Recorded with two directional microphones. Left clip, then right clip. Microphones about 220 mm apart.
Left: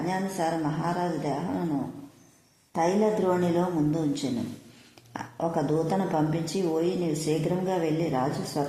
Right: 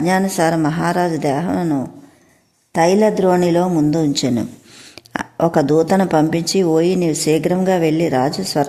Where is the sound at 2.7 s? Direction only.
50° right (ahead or behind).